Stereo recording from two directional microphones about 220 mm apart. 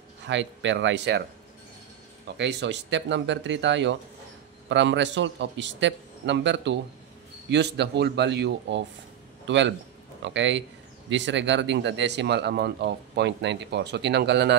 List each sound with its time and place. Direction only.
0.3 s speech: 55° right (ahead or behind)
2.2 s speech: 50° right (ahead or behind)